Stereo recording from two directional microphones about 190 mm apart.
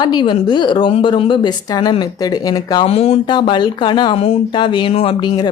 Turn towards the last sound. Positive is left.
turn(degrees=25)  # may be behind; listen again after turning